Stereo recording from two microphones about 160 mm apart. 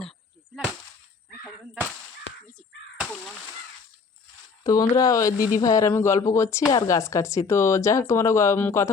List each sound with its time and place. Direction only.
0.5 s whip: 5° right (ahead or behind)
4.6 s speech: 20° left (ahead or behind)